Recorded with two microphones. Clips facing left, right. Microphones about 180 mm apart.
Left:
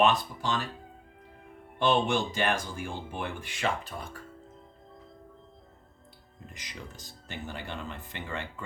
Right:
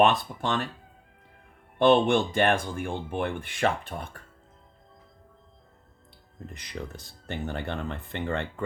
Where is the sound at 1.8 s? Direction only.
55° right (ahead or behind).